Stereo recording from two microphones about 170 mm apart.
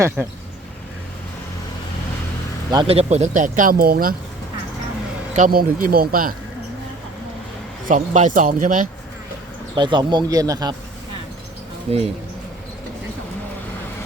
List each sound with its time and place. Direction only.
0.2 s speech: 10° right (ahead or behind)
2.7 s speech: 35° right (ahead or behind); by 4.1 s 60° right (ahead or behind)
5.4 s speech: 55° right (ahead or behind)
7.9 s speech: 45° right (ahead or behind)
9.7 s speech: 25° right (ahead or behind)
11.9 s speech: 35° right (ahead or behind)